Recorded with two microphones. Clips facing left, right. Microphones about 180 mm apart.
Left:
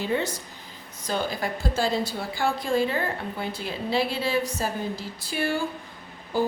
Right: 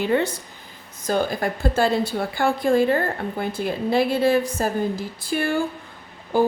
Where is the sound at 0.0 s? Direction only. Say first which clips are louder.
Right 6 dB; 60° right (ahead or behind).